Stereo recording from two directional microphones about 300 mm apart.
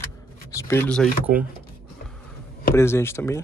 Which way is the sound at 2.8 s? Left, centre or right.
Centre.